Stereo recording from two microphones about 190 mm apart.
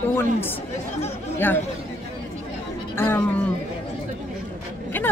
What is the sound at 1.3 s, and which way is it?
Speech, 10° left (ahead or behind).